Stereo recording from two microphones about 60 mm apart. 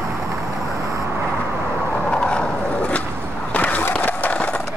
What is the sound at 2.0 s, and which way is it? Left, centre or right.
Skateboard, centre.